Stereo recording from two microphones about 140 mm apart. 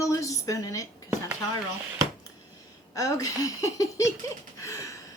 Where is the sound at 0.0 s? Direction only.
20° left (ahead or behind).